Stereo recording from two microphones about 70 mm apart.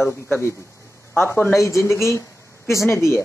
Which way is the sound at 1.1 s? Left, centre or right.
Left.